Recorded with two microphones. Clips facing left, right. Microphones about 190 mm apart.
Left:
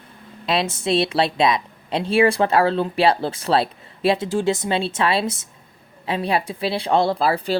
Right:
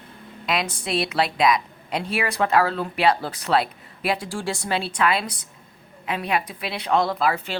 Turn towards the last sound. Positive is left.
turn(degrees=35)  # may be behind; listen again after turning